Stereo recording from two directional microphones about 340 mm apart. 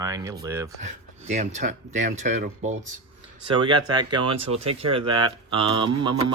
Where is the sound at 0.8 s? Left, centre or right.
Centre.